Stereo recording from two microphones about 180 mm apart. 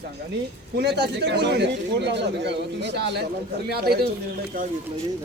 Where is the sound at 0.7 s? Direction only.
70° right (ahead or behind).